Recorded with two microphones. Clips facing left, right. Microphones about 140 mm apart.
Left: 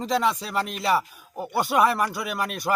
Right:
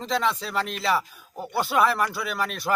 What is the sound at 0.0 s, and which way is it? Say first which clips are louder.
Speech: left 2 dB; 10° left (ahead or behind).